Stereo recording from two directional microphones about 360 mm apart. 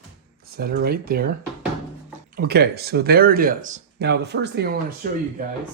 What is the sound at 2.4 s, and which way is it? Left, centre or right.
Speech, right.